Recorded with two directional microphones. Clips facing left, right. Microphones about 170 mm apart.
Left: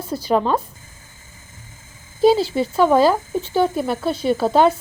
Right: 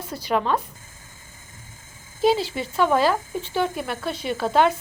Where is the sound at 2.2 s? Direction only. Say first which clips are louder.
Left 6 dB; 35° left (ahead or behind).